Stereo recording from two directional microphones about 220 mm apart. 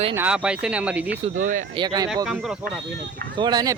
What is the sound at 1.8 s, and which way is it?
Speech, 20° right (ahead or behind).